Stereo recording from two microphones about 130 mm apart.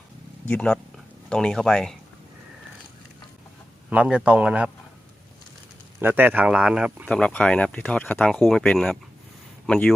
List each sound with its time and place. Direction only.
0.4 s speech: 10° left (ahead or behind)
3.8 s speech: 10° right (ahead or behind)
6.0 s speech: 15° right (ahead or behind)
7.1 s speech: 5° left (ahead or behind)
8.3 s speech: centre (ahead or behind)